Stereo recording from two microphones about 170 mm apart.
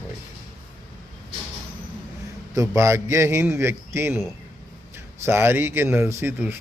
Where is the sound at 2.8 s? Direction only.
15° right (ahead or behind).